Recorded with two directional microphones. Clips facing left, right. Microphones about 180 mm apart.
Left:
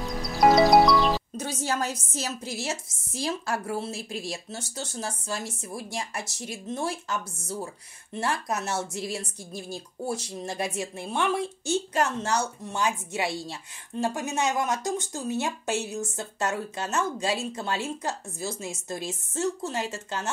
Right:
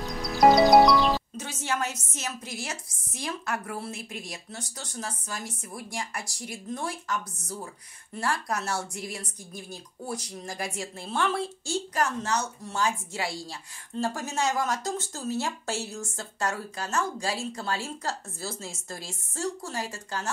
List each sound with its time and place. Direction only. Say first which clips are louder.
0.0 s music: right 1 dB; centre (ahead or behind)
1.4 s a woman's voice: left 2 dB; 35° left (ahead or behind)
12.6 s a woman's voice: left 1 dB; 20° left (ahead or behind)